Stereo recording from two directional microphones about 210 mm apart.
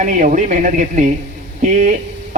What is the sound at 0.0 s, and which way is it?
Speech, 35° right (ahead or behind).